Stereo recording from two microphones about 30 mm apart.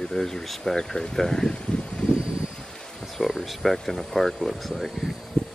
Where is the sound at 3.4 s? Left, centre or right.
Centre.